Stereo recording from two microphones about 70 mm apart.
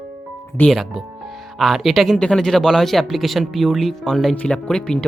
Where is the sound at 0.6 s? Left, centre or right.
Centre.